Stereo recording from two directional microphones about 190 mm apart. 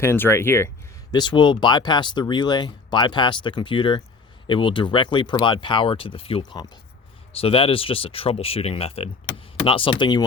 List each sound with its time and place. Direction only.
0.0 s speech: 15° left (ahead or behind)
1.1 s speech: 25° left (ahead or behind)